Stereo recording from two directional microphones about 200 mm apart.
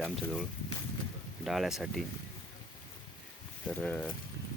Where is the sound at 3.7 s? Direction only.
10° left (ahead or behind).